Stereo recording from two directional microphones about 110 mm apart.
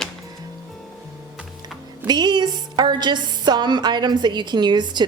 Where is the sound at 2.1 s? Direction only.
40° right (ahead or behind).